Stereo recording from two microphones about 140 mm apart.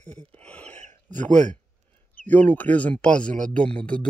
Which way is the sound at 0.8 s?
60° right (ahead or behind).